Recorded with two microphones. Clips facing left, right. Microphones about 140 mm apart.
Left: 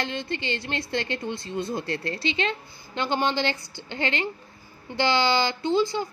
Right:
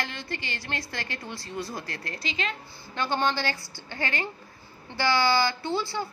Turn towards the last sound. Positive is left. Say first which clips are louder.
# left 6 dB
turn(degrees=15)  # may be behind; listen again after turning